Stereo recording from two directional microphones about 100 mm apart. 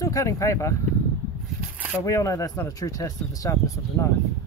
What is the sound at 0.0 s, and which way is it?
Speech, 30° left (ahead or behind).